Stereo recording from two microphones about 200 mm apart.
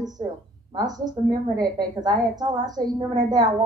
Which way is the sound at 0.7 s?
20° right (ahead or behind).